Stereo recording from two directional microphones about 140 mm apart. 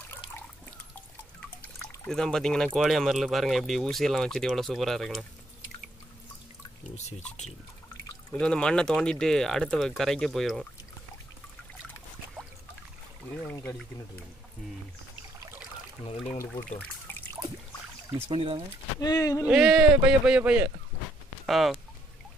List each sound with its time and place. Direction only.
2.0 s speech: 5° left (ahead or behind)
8.3 s speech: 5° left (ahead or behind)
13.5 s speech: 15° left (ahead or behind)
18.3 s speech: 40° right (ahead or behind)
18.9 s speech: 30° left (ahead or behind)
19.4 s speech: 5° right (ahead or behind)